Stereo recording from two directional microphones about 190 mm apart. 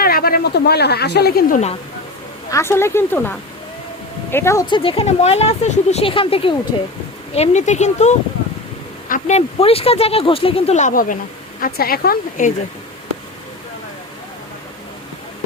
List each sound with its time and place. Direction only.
0.0 s speech: 50° left (ahead or behind)
2.5 s a woman's voice: 15° left (ahead or behind)
4.6 s speech: 25° left (ahead or behind); by 12.5 s 50° left (ahead or behind)